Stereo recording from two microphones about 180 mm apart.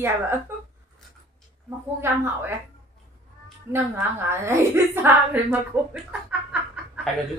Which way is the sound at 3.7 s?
10° right (ahead or behind).